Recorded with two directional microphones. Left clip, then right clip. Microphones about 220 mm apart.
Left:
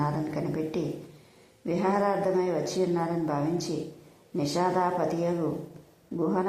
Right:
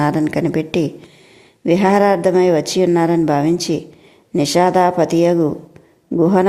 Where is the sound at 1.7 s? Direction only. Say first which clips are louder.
Right 13 dB; 40° right (ahead or behind).